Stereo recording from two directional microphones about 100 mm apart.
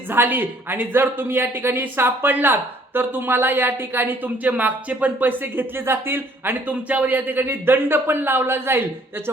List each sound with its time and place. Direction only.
0.1 s speech: 20° right (ahead or behind)